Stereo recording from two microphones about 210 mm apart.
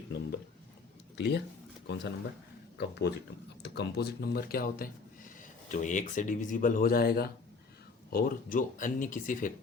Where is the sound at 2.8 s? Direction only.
55° left (ahead or behind).